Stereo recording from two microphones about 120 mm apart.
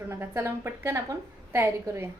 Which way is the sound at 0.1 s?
20° right (ahead or behind).